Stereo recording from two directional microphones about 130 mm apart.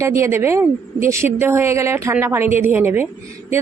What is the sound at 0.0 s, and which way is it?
A woman's voice, 20° right (ahead or behind).